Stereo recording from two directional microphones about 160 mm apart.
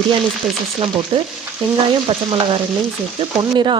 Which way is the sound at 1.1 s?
35° right (ahead or behind).